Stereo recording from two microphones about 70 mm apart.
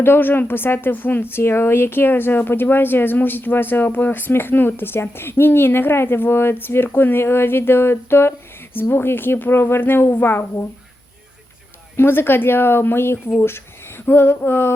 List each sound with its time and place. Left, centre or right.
0.0 s a woman's voice: left
11.9 s a woman's voice: left